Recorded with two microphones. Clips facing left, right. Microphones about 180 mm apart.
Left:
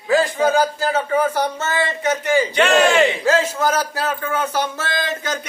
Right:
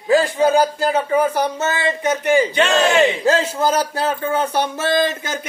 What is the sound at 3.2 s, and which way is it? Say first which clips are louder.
A man's voice: right 1 dB; 30° right (ahead or behind).